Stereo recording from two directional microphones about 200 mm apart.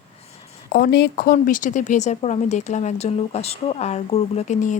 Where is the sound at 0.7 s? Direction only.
50° left (ahead or behind).